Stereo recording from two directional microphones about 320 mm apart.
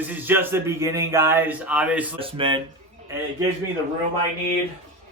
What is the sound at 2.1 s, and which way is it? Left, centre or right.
Speech, centre.